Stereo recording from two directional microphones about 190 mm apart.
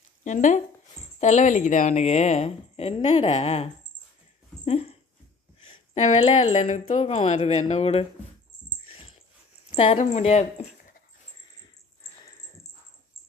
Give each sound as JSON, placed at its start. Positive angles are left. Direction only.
{"t": 0.3, "sound": "a woman's voice", "side_deg": 40}
{"t": 4.6, "sound": "dog", "side_deg": 35}
{"t": 5.6, "sound": "a woman's voice", "side_deg": 30}
{"t": 8.9, "sound": "a sound", "side_deg": 30}
{"t": 9.7, "sound": "a woman's voice", "side_deg": 30}